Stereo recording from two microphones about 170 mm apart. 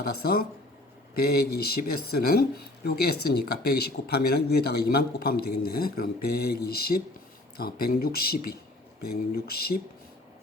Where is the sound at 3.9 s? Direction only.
70° left (ahead or behind).